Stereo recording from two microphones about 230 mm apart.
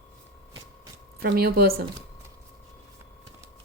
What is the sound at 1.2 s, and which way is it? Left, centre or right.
Speech, right.